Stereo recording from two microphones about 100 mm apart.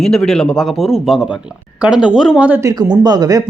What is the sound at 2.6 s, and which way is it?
Speech, 35° right (ahead or behind).